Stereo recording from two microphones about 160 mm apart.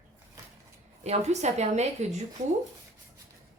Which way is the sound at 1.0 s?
40° right (ahead or behind).